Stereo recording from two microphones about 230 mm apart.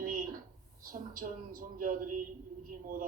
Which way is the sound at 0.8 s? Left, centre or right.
Right.